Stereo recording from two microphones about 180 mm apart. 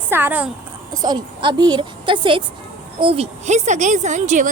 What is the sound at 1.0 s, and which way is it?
A woman's voice, 25° right (ahead or behind).